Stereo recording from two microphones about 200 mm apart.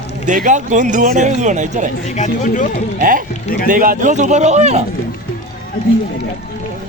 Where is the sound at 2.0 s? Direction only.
35° left (ahead or behind).